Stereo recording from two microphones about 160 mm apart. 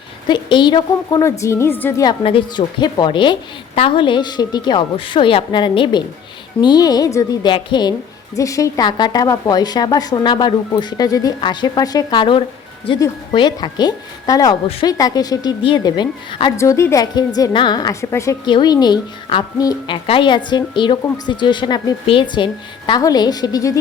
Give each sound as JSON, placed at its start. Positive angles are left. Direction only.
{"t": 0.3, "sound": "a woman's voice", "side_deg": 30}
{"t": 2.2, "sound": "a woman's voice", "side_deg": 30}
{"t": 16.6, "sound": "a woman's voice", "side_deg": 15}